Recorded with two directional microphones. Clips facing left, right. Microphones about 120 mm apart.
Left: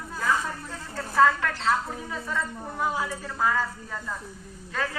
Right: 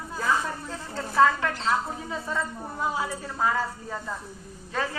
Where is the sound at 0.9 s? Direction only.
20° right (ahead or behind).